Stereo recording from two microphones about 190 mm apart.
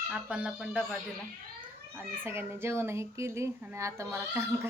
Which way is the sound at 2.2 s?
10° right (ahead or behind).